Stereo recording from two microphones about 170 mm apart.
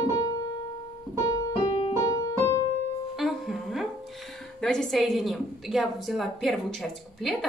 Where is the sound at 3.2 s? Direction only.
Centre (ahead or behind).